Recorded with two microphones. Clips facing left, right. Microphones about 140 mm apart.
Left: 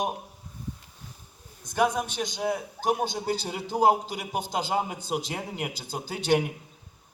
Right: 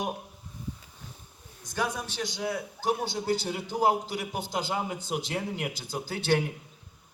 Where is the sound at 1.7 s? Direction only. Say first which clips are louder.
Left 6 dB; 15° left (ahead or behind).